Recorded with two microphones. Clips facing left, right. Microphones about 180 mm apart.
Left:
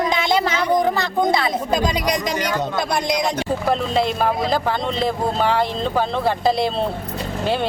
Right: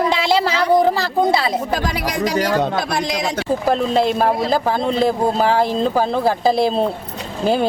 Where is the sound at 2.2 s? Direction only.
60° right (ahead or behind).